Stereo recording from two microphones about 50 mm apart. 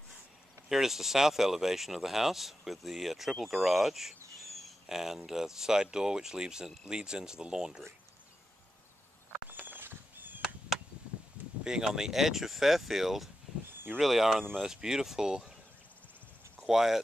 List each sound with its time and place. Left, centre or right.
0.7 s speech: centre
9.5 s a sound: right
11.6 s speech: centre
16.6 s speech: centre